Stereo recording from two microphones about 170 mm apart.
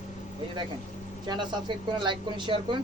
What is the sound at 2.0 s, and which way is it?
Speech, 25° right (ahead or behind).